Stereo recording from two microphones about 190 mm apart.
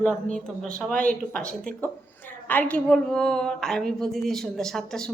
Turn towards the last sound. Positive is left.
turn(degrees=5)  # may be behind; listen again after turning